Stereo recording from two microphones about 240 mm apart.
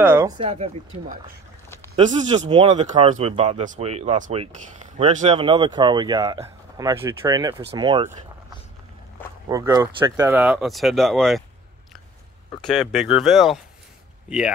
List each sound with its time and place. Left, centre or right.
0.0 s speech: centre
0.4 s speech: right
2.3 s speech: right
9.5 s speech: centre
12.6 s speech: centre